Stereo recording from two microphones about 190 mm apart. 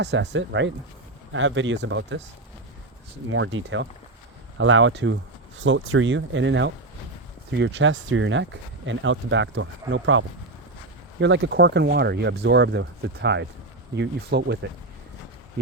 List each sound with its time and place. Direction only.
0.0 s speech: 65° right (ahead or behind)
1.3 s speech: 90° right; by 2.2 s 75° right (ahead or behind)
3.2 s speech: 85° right
4.5 s speech: 90° right; by 5.1 s 75° right (ahead or behind)
5.5 s speech: 85° right
11.2 s speech: 70° right (ahead or behind)